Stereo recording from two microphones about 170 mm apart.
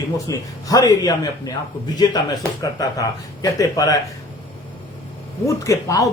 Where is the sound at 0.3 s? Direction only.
20° left (ahead or behind).